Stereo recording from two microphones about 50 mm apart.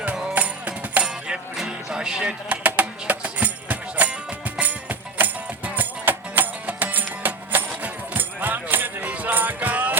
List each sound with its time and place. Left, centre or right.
0.3 s music: right
1.0 s music: centre
2.5 s music: right